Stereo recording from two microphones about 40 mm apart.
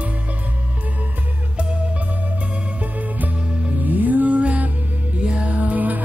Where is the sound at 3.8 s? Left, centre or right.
Right.